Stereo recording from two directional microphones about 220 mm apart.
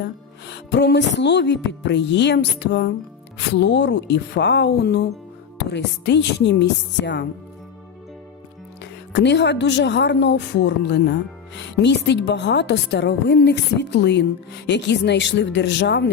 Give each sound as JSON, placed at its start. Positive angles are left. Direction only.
{"t": 0.5, "sound": "a woman's voice", "side_deg": 50}
{"t": 8.8, "sound": "a woman's voice", "side_deg": 50}